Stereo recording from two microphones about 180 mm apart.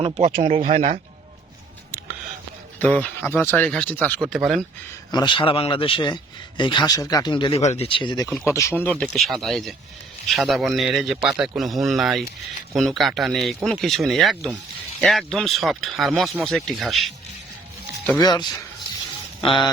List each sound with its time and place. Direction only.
0.2 s speech: 45° right (ahead or behind)
2.7 s speech: 10° left (ahead or behind)
5.1 s speech: 25° left (ahead or behind)
7.6 s speech: 35° left (ahead or behind)
8.3 s speech: centre (ahead or behind)
8.5 s speech: 15° left (ahead or behind)
18.2 s speech: 25° left (ahead or behind)